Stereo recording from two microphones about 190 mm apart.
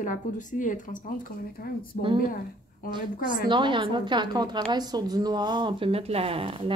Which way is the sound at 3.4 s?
25° right (ahead or behind).